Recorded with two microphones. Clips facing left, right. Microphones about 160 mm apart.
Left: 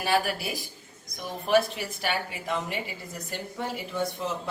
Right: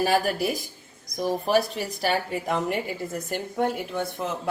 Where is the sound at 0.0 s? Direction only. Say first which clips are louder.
Right 4 dB; 40° right (ahead or behind).